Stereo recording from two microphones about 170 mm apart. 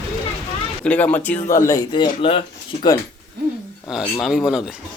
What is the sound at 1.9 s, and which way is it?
Speech, 30° left (ahead or behind).